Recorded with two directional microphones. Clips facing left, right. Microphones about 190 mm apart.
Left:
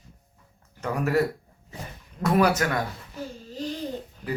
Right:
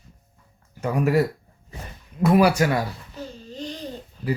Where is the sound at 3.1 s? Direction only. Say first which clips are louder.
Left 2 dB; 5° left (ahead or behind).